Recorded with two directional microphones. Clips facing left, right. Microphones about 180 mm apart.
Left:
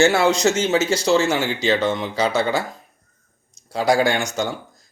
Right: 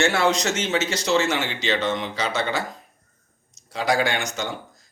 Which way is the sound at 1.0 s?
35° left (ahead or behind).